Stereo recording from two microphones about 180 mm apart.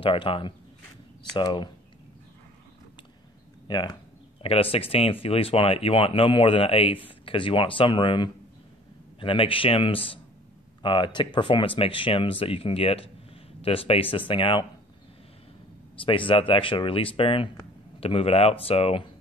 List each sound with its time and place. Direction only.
0.0 s speech: 30° left (ahead or behind)
3.6 s speech: 25° left (ahead or behind)
16.1 s speech: 30° left (ahead or behind)